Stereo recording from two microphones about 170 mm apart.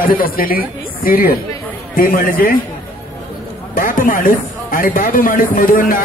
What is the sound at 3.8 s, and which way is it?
Speech, 55° left (ahead or behind).